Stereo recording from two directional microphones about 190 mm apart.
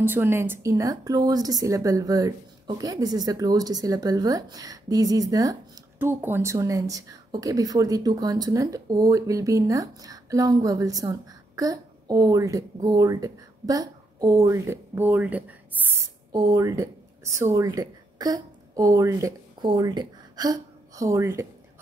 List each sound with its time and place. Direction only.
0.0 s a woman's voice: 10° right (ahead or behind)